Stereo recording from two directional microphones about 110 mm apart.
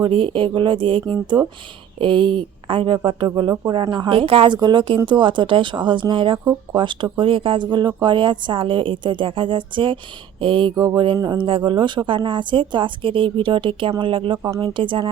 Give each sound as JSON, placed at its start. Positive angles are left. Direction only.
{"t": 0.0, "sound": "speech", "side_deg": -50}
{"t": 10.8, "sound": "a sound", "side_deg": -35}
{"t": 11.2, "sound": "speech", "side_deg": -45}